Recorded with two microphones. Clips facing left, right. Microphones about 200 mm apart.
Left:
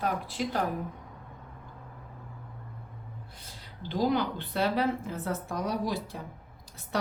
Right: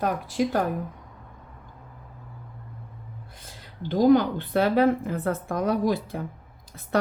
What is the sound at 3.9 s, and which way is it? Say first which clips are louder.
A woman's voice: right 9 dB; 50° right (ahead or behind).